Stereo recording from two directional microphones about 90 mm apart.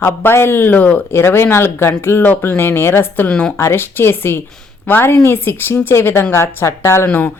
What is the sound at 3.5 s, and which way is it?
Speech, 30° left (ahead or behind).